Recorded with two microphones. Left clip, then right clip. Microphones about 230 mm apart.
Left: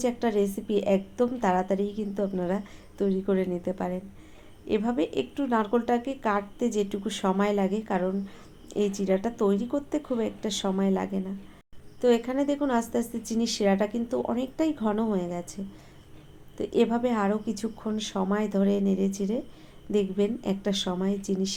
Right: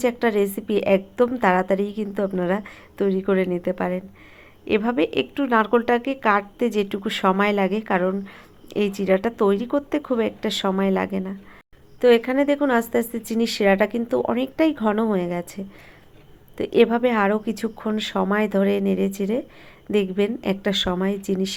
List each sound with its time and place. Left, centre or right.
0.0 s a woman's voice: right